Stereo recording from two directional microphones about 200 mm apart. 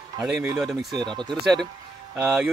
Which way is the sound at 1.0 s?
20° right (ahead or behind).